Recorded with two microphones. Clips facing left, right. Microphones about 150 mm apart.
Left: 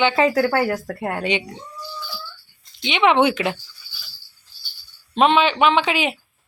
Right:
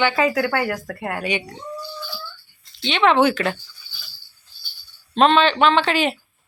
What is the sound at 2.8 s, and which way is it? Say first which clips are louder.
Speech: even; 15° left (ahead or behind).